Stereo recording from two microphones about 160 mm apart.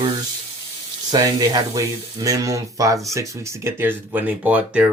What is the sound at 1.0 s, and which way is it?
Speech, 25° right (ahead or behind).